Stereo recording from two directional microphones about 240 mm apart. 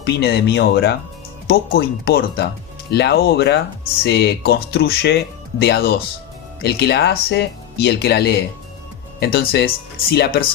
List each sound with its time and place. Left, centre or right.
0.0 s speech: left